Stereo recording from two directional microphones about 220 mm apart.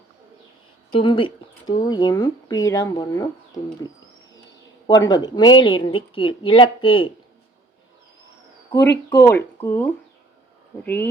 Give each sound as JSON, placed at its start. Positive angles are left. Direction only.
{"t": 0.9, "sound": "speech", "side_deg": 20}
{"t": 4.9, "sound": "speech", "side_deg": 15}
{"t": 8.7, "sound": "speech", "side_deg": 15}